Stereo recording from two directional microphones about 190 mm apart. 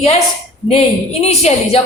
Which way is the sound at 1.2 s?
35° left (ahead or behind).